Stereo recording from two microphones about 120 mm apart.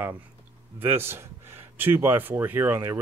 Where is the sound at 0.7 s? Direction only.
20° right (ahead or behind).